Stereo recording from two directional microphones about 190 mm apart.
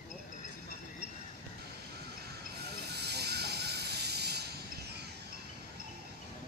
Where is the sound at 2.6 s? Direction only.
60° right (ahead or behind).